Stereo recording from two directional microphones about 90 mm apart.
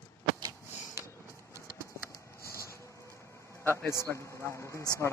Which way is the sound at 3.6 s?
25° left (ahead or behind).